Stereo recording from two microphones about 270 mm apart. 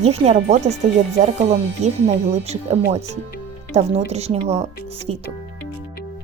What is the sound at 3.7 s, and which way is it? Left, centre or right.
Speech, right.